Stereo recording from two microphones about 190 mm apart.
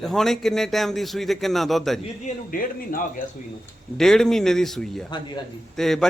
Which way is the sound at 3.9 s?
Centre (ahead or behind).